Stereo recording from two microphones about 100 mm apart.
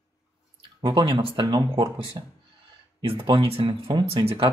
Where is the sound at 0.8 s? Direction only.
50° right (ahead or behind).